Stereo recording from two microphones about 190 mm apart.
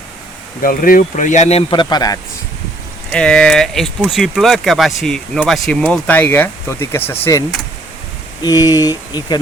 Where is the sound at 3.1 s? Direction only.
5° left (ahead or behind).